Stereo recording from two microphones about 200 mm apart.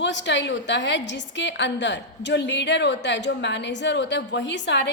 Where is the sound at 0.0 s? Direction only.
60° left (ahead or behind).